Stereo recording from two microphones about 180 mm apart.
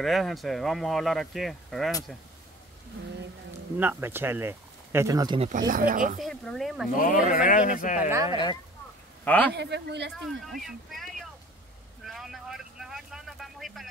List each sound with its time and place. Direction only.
0.0 s speech: centre (ahead or behind)
3.7 s speech: 10° right (ahead or behind)
5.7 s speech: 50° right (ahead or behind)
6.1 s speech: centre (ahead or behind)
7.0 s speech: 45° left (ahead or behind)
8.1 s speech: 20° right (ahead or behind)
9.2 s speech: 10° left (ahead or behind)
9.5 s a man's voice: 70° right (ahead or behind)
10.2 s speech: centre (ahead or behind)
12.0 s vehicle: centre (ahead or behind)